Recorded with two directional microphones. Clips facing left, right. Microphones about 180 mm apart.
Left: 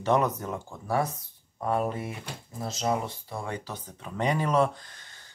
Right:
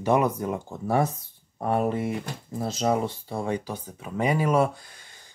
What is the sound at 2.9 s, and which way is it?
Speech, 30° right (ahead or behind).